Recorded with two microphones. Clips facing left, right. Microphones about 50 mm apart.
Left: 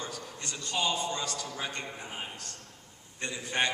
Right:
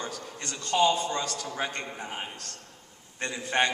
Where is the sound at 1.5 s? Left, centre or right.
Right.